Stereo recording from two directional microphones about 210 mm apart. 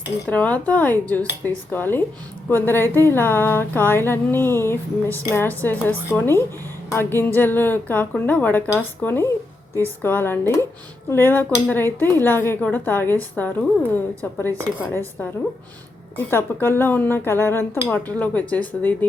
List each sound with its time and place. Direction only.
0.3 s a woman's voice: 5° left (ahead or behind)